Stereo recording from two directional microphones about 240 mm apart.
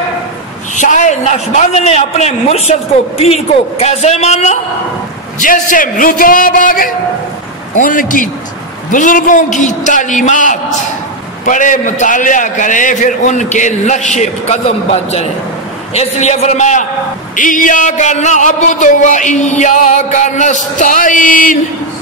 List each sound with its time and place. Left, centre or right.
0.7 s a man's voice: left